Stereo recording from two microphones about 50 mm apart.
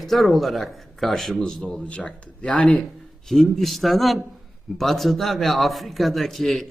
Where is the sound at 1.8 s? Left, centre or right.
Left.